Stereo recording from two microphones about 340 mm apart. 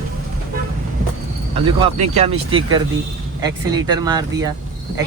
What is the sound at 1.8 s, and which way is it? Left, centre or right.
Speech, centre.